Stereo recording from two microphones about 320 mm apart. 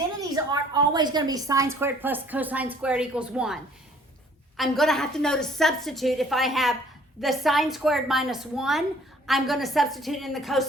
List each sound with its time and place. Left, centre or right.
0.2 s a woman's voice: centre